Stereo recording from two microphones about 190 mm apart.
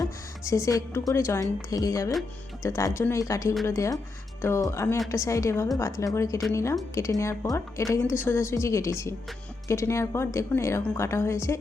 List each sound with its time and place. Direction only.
0.0 s a woman's voice: 15° left (ahead or behind)